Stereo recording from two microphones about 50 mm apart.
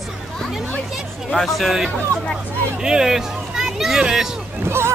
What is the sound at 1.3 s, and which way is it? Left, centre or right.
Speech, centre.